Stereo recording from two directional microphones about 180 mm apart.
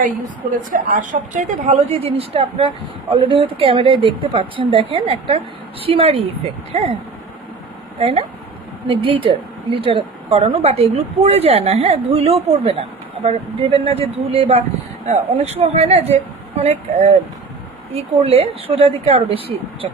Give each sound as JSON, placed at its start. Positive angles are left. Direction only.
{"t": 0.7, "sound": "a woman's voice", "side_deg": -45}
{"t": 7.9, "sound": "a woman's voice", "side_deg": -35}